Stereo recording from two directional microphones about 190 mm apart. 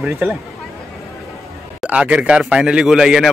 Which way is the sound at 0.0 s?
5° right (ahead or behind).